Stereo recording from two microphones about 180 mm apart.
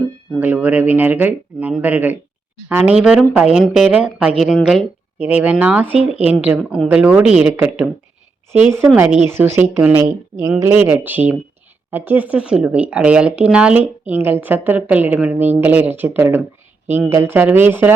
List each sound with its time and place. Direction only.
0.3 s speech: 10° right (ahead or behind)
5.9 s speech: 35° right (ahead or behind)
6.3 s speech: 5° right (ahead or behind)
9.3 s speech: 10° right (ahead or behind)